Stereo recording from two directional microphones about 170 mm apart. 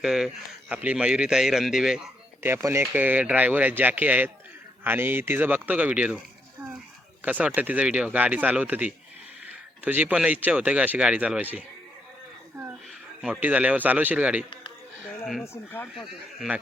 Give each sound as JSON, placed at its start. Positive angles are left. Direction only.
{"t": 0.0, "sound": "speech", "side_deg": -5}
{"t": 2.4, "sound": "speech", "side_deg": -15}
{"t": 13.2, "sound": "speech", "side_deg": -5}
{"t": 16.0, "sound": "speech", "side_deg": 0}